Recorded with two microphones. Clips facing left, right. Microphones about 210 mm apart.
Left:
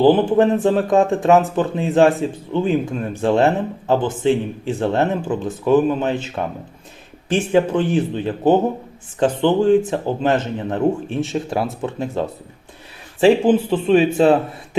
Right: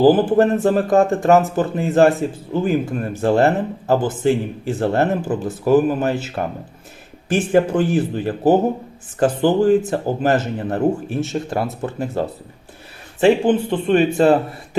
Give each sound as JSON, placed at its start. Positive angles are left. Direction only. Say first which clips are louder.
{"t": 0.0, "sound": "speech", "louder": "even", "side_deg": -5}